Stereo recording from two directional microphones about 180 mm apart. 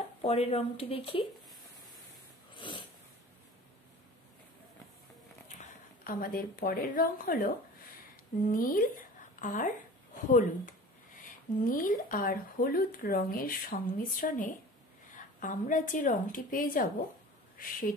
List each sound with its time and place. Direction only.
0.2 s speech: 35° left (ahead or behind)
2.5 s snort: 30° left (ahead or behind)
5.6 s a woman's voice: 50° left (ahead or behind)